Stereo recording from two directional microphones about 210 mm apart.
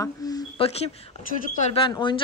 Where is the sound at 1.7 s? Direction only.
25° left (ahead or behind).